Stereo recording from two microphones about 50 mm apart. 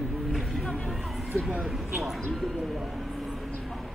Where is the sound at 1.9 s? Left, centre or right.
Centre.